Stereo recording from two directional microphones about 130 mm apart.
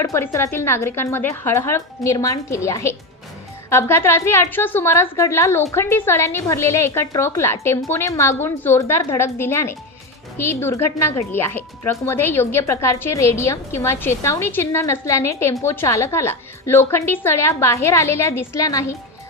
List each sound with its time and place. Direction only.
0.0 s speech: 20° left (ahead or behind)